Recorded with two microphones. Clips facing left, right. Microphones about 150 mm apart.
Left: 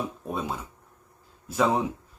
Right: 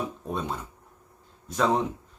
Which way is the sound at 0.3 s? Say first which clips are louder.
Even; 5° left (ahead or behind).